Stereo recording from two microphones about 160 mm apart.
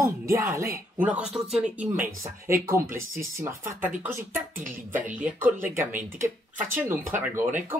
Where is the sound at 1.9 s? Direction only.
15° right (ahead or behind).